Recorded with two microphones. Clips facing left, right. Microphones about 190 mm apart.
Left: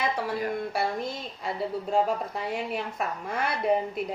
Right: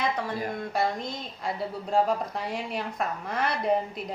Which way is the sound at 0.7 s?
10° left (ahead or behind).